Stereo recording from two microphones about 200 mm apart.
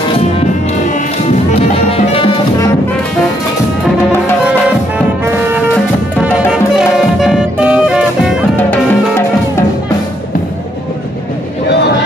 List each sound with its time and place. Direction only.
1.5 s music: 30° left (ahead or behind)
6.2 s music: 5° right (ahead or behind)